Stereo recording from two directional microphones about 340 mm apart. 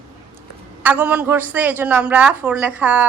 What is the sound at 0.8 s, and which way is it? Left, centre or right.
A woman's voice, centre.